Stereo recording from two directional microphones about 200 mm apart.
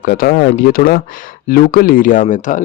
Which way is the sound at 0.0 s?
45° left (ahead or behind).